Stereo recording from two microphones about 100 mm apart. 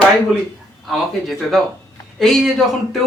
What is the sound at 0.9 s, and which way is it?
Speech, centre (ahead or behind).